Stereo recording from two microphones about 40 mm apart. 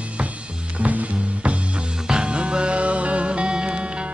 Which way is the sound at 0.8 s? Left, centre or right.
Right.